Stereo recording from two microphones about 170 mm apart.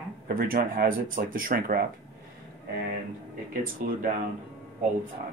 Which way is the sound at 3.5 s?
60° right (ahead or behind).